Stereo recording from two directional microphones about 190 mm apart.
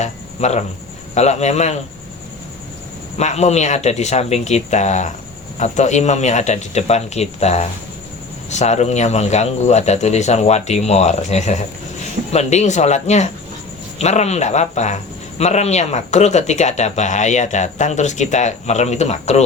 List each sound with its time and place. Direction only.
0.0 s speech: 35° left (ahead or behind)
3.2 s speech: 35° left (ahead or behind)